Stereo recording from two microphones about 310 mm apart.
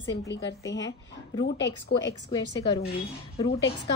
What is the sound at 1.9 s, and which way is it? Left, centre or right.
Speech, left.